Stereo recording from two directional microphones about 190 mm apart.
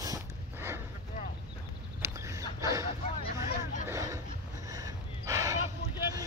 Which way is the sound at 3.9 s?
20° right (ahead or behind).